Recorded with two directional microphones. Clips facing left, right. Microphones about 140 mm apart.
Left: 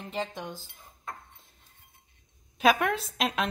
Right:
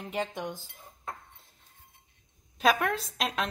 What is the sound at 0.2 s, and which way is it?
Speech, 15° right (ahead or behind).